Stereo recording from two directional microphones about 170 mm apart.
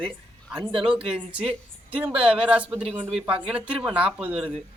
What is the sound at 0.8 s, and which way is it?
Speech, 35° right (ahead or behind).